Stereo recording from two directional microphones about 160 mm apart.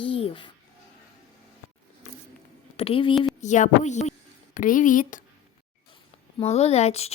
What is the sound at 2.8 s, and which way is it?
Speech, 35° left (ahead or behind).